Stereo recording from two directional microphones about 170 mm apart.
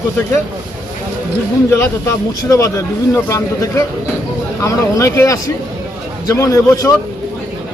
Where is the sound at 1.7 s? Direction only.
15° left (ahead or behind).